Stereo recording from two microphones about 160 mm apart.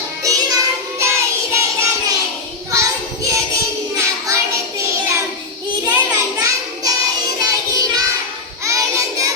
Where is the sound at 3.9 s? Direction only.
20° right (ahead or behind).